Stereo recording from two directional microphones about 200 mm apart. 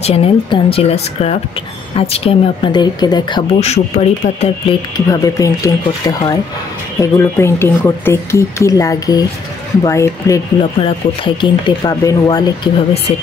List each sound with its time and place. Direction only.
0.0 s a woman's voice: 30° left (ahead or behind)
4.9 s speech: 15° left (ahead or behind)